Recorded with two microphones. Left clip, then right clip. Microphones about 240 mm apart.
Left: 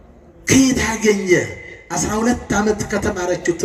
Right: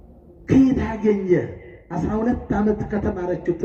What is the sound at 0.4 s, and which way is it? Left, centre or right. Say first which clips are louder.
Throat clearing: left 3 dB; left.